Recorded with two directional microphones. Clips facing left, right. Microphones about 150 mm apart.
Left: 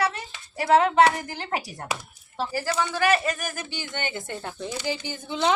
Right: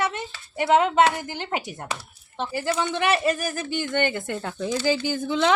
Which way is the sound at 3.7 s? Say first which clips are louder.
Right 8 dB; 50° right (ahead or behind).